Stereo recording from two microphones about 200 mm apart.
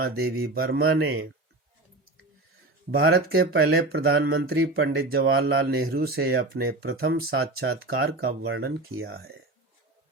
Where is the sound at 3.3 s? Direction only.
50° right (ahead or behind).